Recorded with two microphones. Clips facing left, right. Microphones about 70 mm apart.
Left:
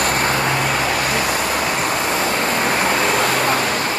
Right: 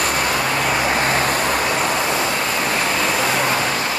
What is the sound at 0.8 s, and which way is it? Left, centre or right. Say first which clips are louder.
Vehicle: right 1 dB; right.